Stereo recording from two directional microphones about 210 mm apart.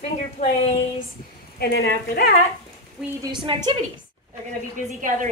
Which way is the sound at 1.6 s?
50° left (ahead or behind).